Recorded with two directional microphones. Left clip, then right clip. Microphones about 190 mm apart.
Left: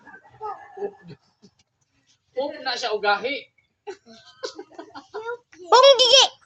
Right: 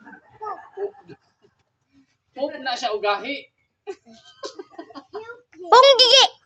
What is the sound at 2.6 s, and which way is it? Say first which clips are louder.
Speech: even; 20° right (ahead or behind).